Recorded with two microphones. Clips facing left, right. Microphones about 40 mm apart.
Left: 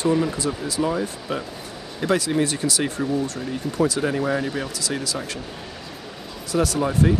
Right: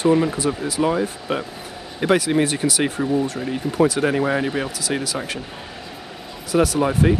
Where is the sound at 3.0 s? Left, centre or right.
Centre.